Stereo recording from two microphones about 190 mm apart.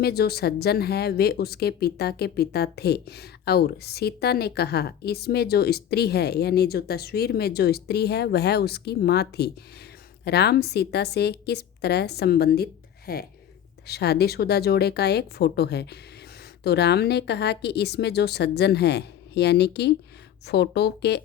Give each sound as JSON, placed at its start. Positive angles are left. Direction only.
{"t": 0.0, "sound": "speech", "side_deg": 55}